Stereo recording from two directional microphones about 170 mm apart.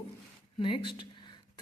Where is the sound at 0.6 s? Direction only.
30° left (ahead or behind).